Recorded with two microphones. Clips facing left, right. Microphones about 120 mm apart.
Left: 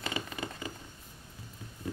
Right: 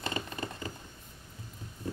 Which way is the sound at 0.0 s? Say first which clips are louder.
Right 1 dB; 35° right (ahead or behind).